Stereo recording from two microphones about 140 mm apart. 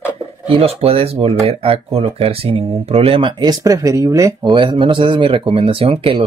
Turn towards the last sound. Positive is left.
turn(degrees=-40)  # may be behind; listen again after turning